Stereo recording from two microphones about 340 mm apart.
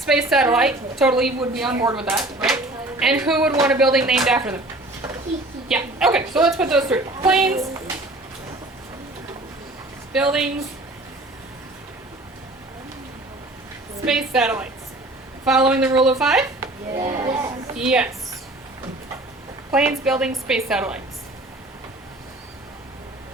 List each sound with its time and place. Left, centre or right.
0.0 s a woman's voice: centre
5.6 s a woman's voice: centre
10.1 s speech: centre
14.0 s a woman's voice: centre
15.7 s a woman's voice: centre
17.0 s a child's voice: centre
19.7 s a woman's voice: centre